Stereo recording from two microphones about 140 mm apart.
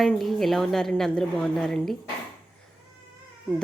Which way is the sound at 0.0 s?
Centre (ahead or behind).